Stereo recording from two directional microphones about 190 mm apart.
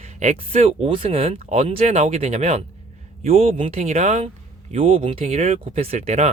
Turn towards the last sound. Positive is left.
turn(degrees=-35)  # may be behind; listen again after turning